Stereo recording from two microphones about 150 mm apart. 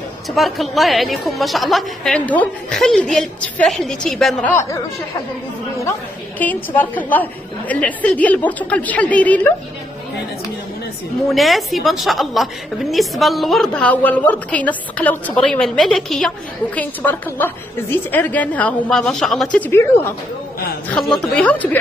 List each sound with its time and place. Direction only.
0.3 s a woman's voice: centre (ahead or behind)
4.5 s a woman's voice: 15° left (ahead or behind)
5.8 s a woman's voice: 15° left (ahead or behind)
11.2 s a woman's voice: centre (ahead or behind)
20.9 s a woman's voice: 5° left (ahead or behind)